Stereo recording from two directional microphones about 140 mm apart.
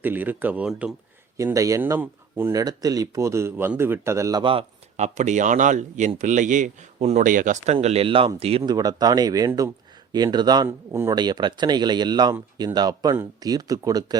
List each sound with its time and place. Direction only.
0.0 s speech: 15° right (ahead or behind)
1.4 s speech: 25° right (ahead or behind)
4.9 s speech: 55° right (ahead or behind)
8.6 s speech: 25° right (ahead or behind)
10.7 s speech: 20° right (ahead or behind)
11.1 s speech: 30° right (ahead or behind)